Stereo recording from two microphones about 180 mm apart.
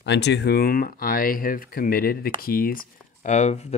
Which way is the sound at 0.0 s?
75° left (ahead or behind).